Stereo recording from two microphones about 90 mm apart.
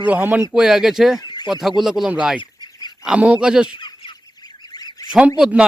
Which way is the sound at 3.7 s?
65° left (ahead or behind).